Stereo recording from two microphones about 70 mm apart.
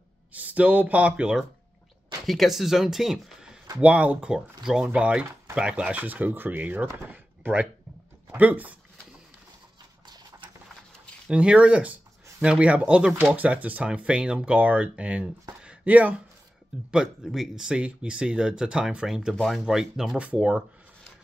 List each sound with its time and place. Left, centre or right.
0.3 s speech: right
2.2 s speech: centre
3.8 s speech: centre
7.1 s a sound: right
8.4 s speech: right
11.2 s speech: centre
15.6 s a sound: centre
16.9 s speech: centre
19.3 s speech: centre
19.6 s speech: centre